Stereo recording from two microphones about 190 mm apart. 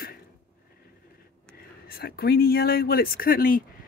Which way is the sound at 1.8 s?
55° left (ahead or behind).